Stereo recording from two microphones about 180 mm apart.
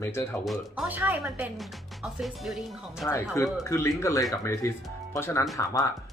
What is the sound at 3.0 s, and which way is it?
Speech, 15° left (ahead or behind).